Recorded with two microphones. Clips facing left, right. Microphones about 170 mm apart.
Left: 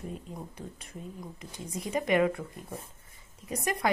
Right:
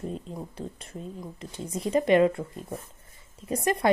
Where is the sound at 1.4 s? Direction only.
30° right (ahead or behind).